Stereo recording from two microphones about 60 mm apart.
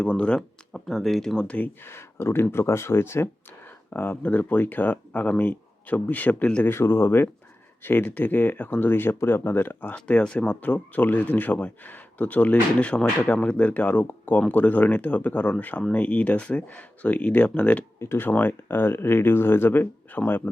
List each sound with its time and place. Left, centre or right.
0.0 s speech: centre
1.5 s speech: left
1.8 s speech: left
6.7 s speech: left
9.8 s speech: left
18.0 s speech: left
18.3 s speech: left